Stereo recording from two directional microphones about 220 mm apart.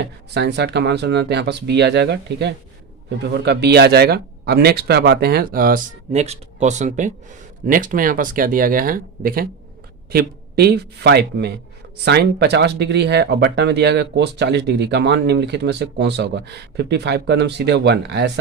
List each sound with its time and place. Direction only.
0.3 s speech: 50° right (ahead or behind)
6.1 s speech: 30° right (ahead or behind); by 18.3 s 50° right (ahead or behind)